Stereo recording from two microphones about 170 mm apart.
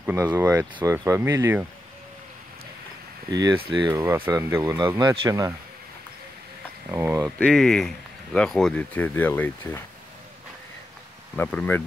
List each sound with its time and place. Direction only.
0.0 s speech: 10° right (ahead or behind)
3.3 s speech: 20° right (ahead or behind)
4.3 s speech: 15° right (ahead or behind)
6.9 s speech: 15° right (ahead or behind)
7.3 s speech: 5° left (ahead or behind)
11.3 s speech: 10° left (ahead or behind)